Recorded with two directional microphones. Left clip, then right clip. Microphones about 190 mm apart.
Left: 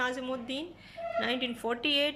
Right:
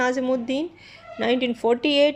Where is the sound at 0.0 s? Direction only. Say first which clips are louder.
Right 10 dB; 35° right (ahead or behind).